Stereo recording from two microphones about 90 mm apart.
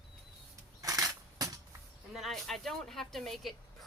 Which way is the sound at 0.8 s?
40° right (ahead or behind).